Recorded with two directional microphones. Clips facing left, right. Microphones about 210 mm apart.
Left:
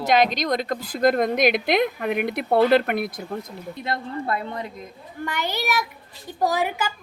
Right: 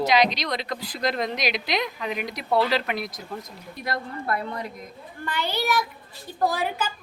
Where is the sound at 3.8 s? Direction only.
25° left (ahead or behind).